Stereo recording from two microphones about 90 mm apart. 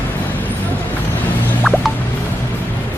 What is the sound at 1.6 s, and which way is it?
Music, centre (ahead or behind).